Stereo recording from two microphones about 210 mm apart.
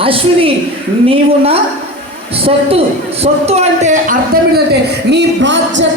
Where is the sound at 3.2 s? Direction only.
30° right (ahead or behind).